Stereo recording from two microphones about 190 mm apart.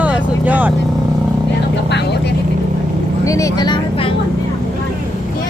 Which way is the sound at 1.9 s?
65° left (ahead or behind).